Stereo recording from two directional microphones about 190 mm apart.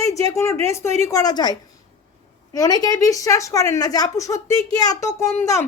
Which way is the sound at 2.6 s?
20° left (ahead or behind).